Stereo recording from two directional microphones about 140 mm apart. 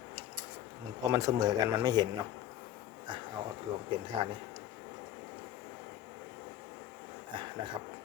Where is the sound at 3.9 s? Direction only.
35° right (ahead or behind).